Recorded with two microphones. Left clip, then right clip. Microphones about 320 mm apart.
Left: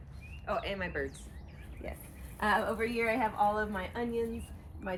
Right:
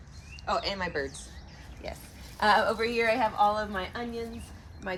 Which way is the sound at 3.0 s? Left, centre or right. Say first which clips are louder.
Right 5 dB; right.